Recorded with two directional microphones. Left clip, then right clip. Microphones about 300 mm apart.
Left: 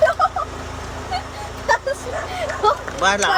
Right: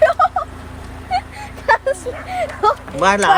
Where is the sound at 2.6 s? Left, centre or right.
Right.